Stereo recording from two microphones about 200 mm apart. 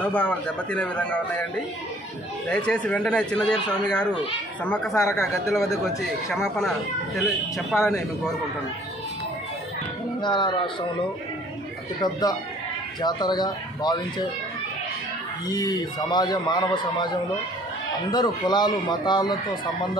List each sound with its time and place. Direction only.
0.0 s speech: 5° left (ahead or behind)
2.5 s speech: 5° left (ahead or behind)
4.6 s speech: 5° left (ahead or behind)
10.2 s a man's voice: 25° left (ahead or behind)
12.0 s a man's voice: 20° left (ahead or behind)
15.4 s a man's voice: 20° left (ahead or behind)